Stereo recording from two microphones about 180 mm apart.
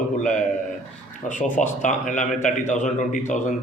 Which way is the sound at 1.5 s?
45° left (ahead or behind).